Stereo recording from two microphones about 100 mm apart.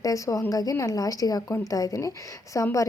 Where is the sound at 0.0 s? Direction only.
35° left (ahead or behind).